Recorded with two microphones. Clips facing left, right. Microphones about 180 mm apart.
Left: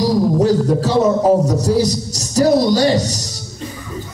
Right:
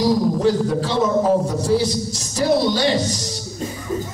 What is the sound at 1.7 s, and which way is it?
A man's voice, 40° left (ahead or behind).